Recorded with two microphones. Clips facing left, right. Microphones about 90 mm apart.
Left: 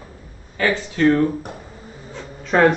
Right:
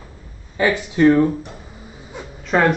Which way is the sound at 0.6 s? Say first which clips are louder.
Right 3 dB; 15° right (ahead or behind).